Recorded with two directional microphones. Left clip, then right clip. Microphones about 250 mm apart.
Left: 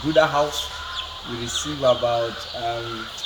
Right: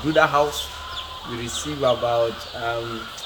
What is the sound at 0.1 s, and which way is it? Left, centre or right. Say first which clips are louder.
Speech: even; centre.